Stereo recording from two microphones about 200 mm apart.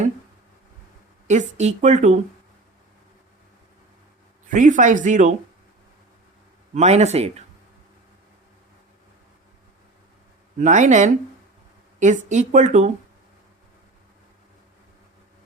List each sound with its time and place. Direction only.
1.3 s speech: 35° right (ahead or behind)
4.4 s speech: 40° right (ahead or behind)
6.7 s speech: 35° right (ahead or behind)
10.6 s speech: 40° right (ahead or behind)